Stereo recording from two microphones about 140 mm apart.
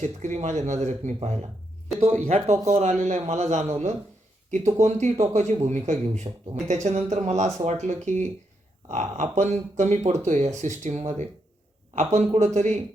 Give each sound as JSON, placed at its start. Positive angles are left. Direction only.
{"t": 0.0, "sound": "a man's voice", "side_deg": -60}